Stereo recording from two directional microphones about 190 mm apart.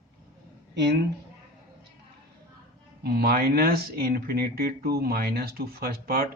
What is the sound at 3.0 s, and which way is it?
Speech, 55° right (ahead or behind).